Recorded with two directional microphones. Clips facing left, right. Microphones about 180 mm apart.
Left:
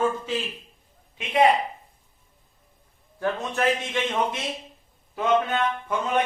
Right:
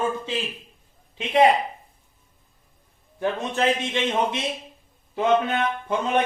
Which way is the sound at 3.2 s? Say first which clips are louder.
Right 1 dB; 20° right (ahead or behind).